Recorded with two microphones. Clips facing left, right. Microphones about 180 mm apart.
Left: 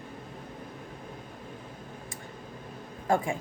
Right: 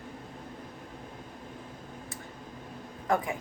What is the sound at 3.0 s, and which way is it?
Speech, 25° left (ahead or behind).